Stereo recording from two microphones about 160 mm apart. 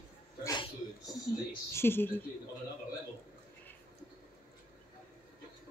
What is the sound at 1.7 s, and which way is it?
Speech, 15° left (ahead or behind).